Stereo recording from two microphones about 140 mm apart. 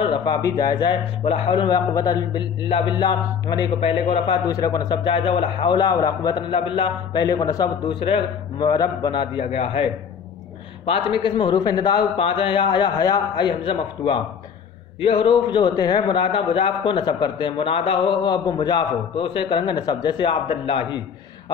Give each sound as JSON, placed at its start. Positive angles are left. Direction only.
{"t": 0.0, "sound": "a man's voice", "side_deg": 35}
{"t": 4.5, "sound": "a man's voice", "side_deg": 25}
{"t": 9.5, "sound": "a man's voice", "side_deg": 50}
{"t": 10.9, "sound": "a man's voice", "side_deg": 40}